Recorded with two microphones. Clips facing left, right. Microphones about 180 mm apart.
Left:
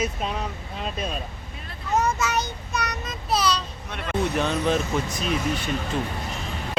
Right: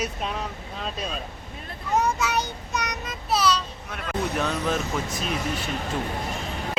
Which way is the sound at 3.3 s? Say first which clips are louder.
Right 1 dB; 5° right (ahead or behind).